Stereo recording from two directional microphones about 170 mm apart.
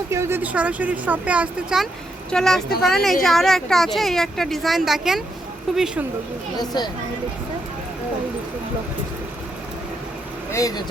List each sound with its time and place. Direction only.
0.1 s a woman's voice: 15° right (ahead or behind)
6.6 s speech: 25° left (ahead or behind)
10.5 s speech: 20° left (ahead or behind)